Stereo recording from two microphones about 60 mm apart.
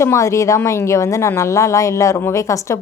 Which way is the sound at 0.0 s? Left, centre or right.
Left.